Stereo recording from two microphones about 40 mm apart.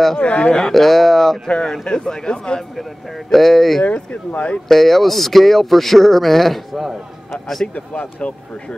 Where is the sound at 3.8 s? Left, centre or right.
Left.